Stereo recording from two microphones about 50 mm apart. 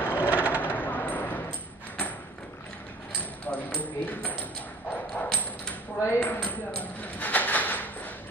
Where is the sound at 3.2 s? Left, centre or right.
Left.